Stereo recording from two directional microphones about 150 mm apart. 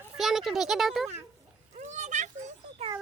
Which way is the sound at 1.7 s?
50° right (ahead or behind).